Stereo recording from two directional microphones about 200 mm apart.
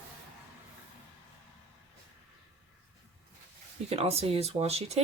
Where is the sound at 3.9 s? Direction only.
30° right (ahead or behind).